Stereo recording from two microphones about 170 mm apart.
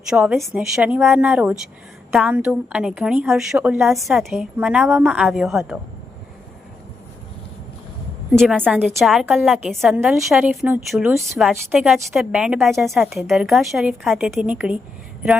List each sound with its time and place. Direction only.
0.1 s a woman's voice: 5° right (ahead or behind)
8.3 s a woman's voice: centre (ahead or behind)